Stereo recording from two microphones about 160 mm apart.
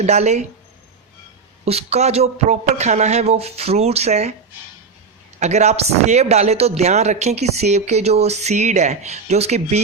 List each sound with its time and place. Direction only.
0.0 s speech: 45° right (ahead or behind)
1.6 s a man's voice: 40° right (ahead or behind)
5.4 s speech: 45° right (ahead or behind)